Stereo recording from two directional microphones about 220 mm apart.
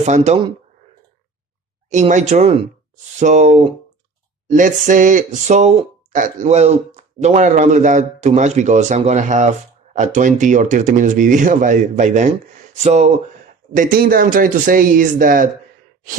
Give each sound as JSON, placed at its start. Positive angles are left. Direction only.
{"t": 0.0, "sound": "speech", "side_deg": -30}
{"t": 1.9, "sound": "speech", "side_deg": -35}